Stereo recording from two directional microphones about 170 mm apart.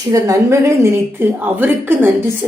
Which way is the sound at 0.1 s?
20° right (ahead or behind).